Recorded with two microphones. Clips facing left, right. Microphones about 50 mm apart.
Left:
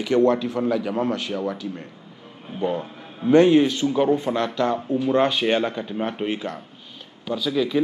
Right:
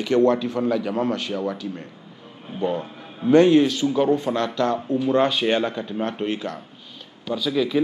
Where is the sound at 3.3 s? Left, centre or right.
Centre.